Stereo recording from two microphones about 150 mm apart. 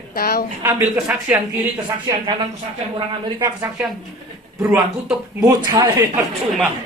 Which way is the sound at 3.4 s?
20° right (ahead or behind).